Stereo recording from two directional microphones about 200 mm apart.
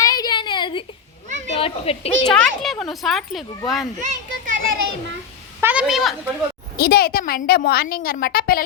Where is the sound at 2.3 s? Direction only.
Centre (ahead or behind).